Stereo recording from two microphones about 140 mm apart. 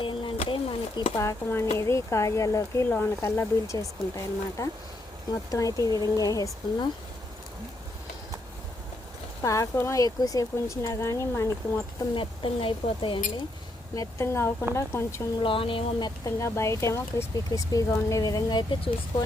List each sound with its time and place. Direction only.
0.0 s a sound: 40° left (ahead or behind)
1.1 s speech: 20° left (ahead or behind)
9.4 s speech: 25° left (ahead or behind)
12.1 s speech: 40° left (ahead or behind)
13.9 s speech: 25° left (ahead or behind)
15.4 s speech: 40° left (ahead or behind)